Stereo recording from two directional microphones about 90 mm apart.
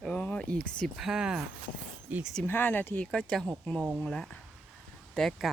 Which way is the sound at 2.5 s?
20° left (ahead or behind).